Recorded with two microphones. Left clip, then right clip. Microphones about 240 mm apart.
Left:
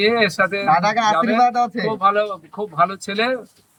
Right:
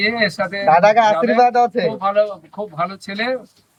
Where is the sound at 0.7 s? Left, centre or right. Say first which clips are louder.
Right 7 dB; centre.